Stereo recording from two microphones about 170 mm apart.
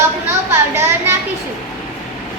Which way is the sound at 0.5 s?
15° right (ahead or behind).